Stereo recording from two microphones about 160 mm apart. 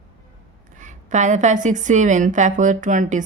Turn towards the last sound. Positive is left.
turn(degrees=-50)  # may be behind; listen again after turning